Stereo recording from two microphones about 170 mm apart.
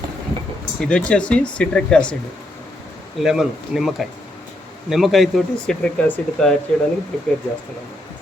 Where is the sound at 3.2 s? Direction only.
5° right (ahead or behind).